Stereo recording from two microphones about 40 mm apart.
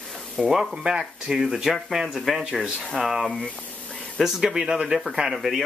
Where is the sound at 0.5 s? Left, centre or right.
Centre.